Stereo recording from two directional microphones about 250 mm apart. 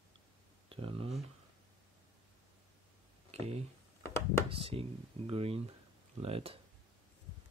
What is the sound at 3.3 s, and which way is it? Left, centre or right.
Speech, right.